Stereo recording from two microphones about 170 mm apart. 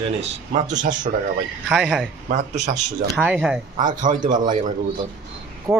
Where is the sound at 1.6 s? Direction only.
5° right (ahead or behind).